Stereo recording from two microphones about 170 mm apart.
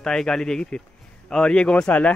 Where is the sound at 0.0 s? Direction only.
5° left (ahead or behind).